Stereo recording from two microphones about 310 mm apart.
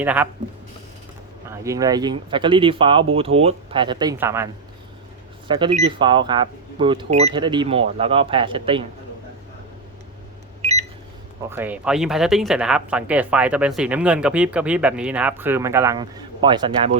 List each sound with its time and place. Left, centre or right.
0.0 s speech: centre
1.5 s speech: centre
5.5 s speech: centre
10.6 s a sound: right
11.4 s speech: centre